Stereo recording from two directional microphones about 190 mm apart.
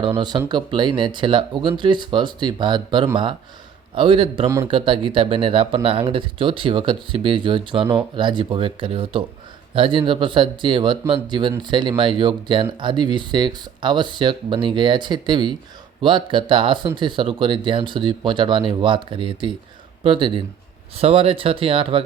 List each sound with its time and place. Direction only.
0.2 s speech: 20° right (ahead or behind)
4.4 s speech: 15° right (ahead or behind)
4.7 s speech: 25° right (ahead or behind)